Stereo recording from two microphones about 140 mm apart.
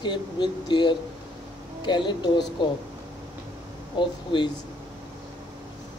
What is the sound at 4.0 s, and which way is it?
Speech, 35° left (ahead or behind).